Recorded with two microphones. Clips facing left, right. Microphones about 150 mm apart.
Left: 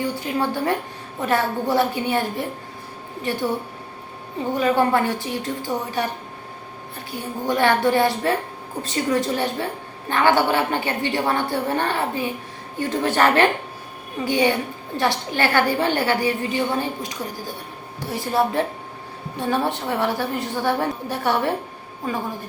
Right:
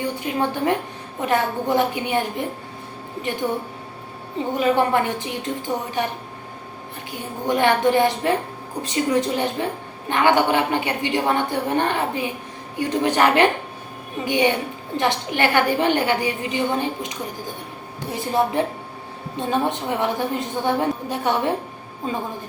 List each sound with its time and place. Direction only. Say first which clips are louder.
0.0 s a woman's voice: even; 20° right (ahead or behind)
4.6 s a woman's voice: even; 20° right (ahead or behind)
7.4 s a woman's voice: right 1 dB; 20° right (ahead or behind)